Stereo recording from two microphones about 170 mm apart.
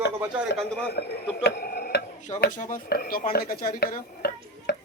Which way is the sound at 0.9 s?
70° left (ahead or behind).